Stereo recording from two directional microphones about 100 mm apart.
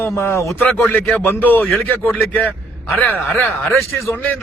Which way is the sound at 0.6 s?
20° left (ahead or behind).